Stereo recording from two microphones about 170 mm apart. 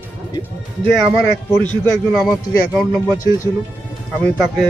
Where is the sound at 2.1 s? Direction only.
Centre (ahead or behind).